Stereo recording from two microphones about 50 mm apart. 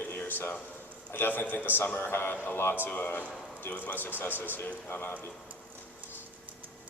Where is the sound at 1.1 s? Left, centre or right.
Left.